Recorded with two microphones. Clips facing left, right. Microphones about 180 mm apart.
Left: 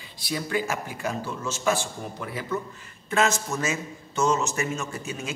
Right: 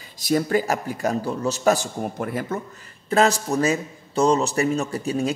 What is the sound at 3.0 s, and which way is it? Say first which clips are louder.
Speech: right 5 dB; 35° right (ahead or behind).